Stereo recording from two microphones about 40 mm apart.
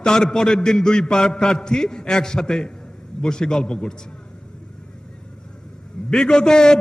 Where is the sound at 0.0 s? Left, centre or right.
Centre.